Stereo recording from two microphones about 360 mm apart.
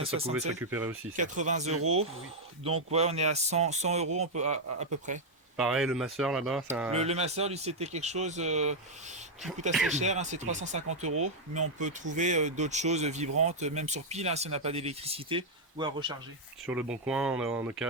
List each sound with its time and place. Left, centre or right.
0.0 s speech: centre
1.1 s speech: right
5.5 s speech: centre
6.9 s speech: centre
9.9 s speech: centre
12.1 s speech: centre